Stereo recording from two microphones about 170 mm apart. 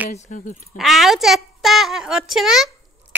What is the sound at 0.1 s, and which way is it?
Speech, 45° left (ahead or behind).